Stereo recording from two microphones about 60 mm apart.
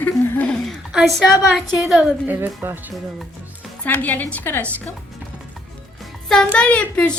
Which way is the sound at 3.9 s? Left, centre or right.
Left.